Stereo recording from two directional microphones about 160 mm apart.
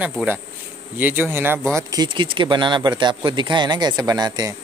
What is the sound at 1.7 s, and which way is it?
Speech, 25° right (ahead or behind).